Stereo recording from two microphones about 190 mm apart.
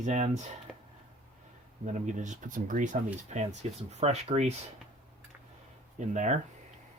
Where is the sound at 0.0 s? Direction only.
40° right (ahead or behind).